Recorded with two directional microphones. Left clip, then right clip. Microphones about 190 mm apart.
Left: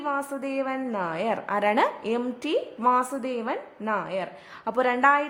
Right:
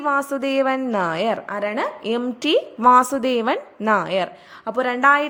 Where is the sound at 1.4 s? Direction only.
Centre (ahead or behind).